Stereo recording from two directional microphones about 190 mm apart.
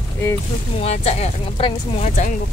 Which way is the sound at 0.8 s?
35° left (ahead or behind).